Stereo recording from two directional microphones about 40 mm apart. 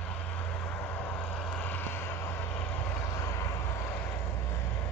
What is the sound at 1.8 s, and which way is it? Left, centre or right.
Vehicle, left.